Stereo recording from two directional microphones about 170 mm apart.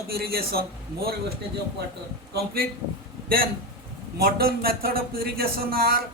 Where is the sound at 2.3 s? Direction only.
60° right (ahead or behind).